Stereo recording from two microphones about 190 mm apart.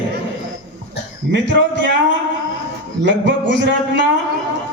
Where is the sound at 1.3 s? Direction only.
65° right (ahead or behind).